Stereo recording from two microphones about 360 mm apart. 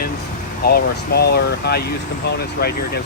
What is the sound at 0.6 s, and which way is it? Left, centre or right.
Speech, left.